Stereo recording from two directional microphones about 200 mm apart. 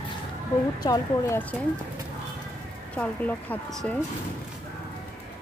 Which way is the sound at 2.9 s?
5° left (ahead or behind).